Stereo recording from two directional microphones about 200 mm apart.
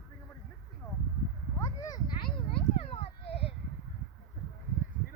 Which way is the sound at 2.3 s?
25° left (ahead or behind).